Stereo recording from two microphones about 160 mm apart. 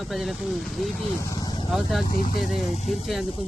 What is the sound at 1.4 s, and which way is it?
Vehicle, 25° left (ahead or behind).